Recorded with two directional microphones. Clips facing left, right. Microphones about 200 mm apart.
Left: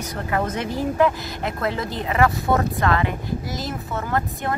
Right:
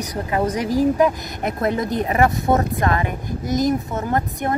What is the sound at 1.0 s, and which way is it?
Speech, 20° right (ahead or behind).